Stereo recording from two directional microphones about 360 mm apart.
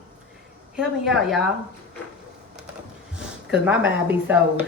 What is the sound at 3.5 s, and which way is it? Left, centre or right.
A woman's voice, centre.